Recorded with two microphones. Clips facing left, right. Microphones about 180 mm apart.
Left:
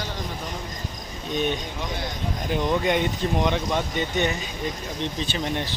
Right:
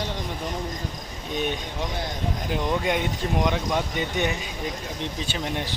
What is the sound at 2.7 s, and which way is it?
Speech, 5° right (ahead or behind).